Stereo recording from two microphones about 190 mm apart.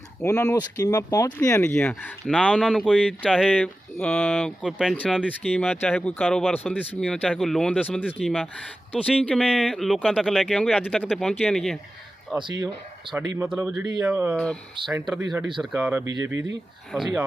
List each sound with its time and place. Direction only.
0.2 s speech: 15° left (ahead or behind)
12.3 s speech: 20° right (ahead or behind)